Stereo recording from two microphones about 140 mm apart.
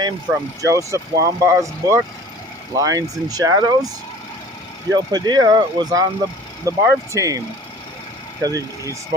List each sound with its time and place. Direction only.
0.6 s speech: 25° right (ahead or behind)
4.9 s speech: 30° right (ahead or behind)